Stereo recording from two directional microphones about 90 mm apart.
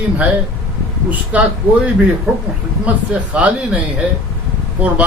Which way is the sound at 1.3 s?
15° right (ahead or behind).